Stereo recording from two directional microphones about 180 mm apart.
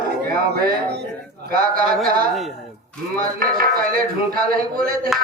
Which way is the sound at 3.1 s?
55° right (ahead or behind).